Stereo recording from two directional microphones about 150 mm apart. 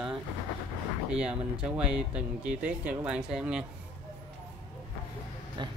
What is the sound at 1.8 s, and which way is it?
Speech, 5° right (ahead or behind).